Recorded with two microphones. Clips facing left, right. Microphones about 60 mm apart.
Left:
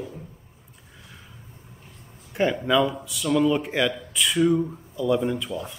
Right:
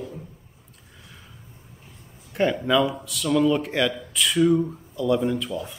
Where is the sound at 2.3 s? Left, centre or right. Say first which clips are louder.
Right 1 dB; centre.